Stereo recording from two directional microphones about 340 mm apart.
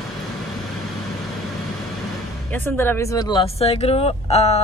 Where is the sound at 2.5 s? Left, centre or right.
Centre.